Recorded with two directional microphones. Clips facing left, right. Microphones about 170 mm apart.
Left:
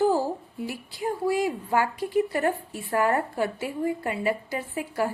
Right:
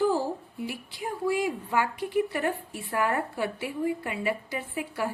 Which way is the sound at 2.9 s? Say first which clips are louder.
Left 4 dB; 40° left (ahead or behind).